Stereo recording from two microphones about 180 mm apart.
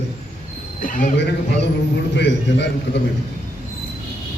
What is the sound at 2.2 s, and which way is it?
Speech, 75° left (ahead or behind).